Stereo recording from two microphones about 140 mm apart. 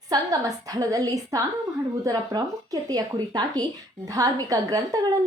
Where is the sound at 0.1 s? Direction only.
25° right (ahead or behind).